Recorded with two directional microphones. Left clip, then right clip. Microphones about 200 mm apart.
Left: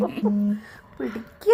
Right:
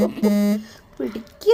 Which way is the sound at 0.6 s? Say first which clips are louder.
Right 3 dB; 60° right (ahead or behind).